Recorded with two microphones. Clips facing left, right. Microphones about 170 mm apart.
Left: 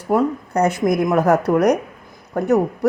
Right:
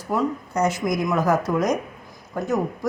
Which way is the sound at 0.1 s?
55° left (ahead or behind).